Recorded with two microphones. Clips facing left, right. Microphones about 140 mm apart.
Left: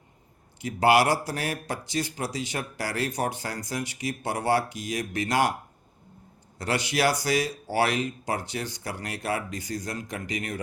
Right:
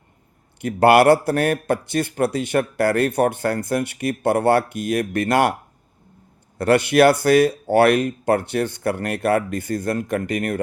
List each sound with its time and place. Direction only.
0.6 s a man's voice: 60° right (ahead or behind)
6.6 s a man's voice: 60° right (ahead or behind)